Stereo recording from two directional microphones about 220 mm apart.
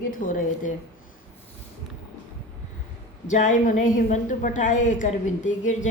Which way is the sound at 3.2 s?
35° left (ahead or behind).